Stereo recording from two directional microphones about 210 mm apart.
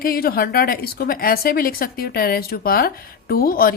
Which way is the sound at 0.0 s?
45° left (ahead or behind).